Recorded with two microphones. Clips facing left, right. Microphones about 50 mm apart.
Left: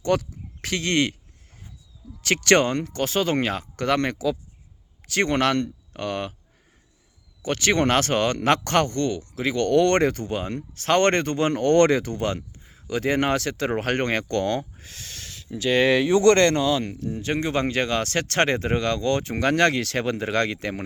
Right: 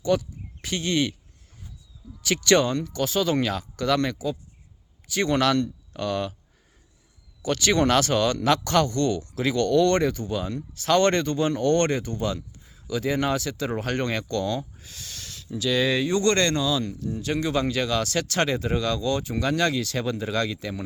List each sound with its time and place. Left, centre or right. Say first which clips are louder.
0.0 s speech: left 1 dB; left
2.2 s speech: left 2 dB; left
5.0 s speech: left 3 dB; left
5.3 s speech: right 3 dB; left
7.4 s speech: even; left
9.0 s speech: right 1 dB; left
9.6 s speech: left 2 dB; left
12.6 s speech: left 2 dB; left
15.9 s speech: left 5 dB; left